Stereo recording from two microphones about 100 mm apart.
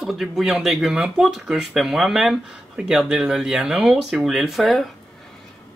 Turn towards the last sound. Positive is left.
turn(degrees=0)  # may be behind; listen again after turning